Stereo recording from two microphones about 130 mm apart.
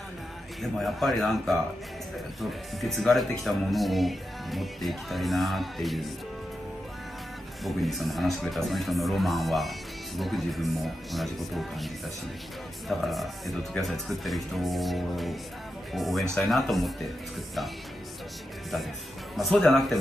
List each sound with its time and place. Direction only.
0.6 s speech: centre (ahead or behind)
2.8 s speech: centre (ahead or behind)
7.6 s speech: centre (ahead or behind)
19.3 s speech: centre (ahead or behind)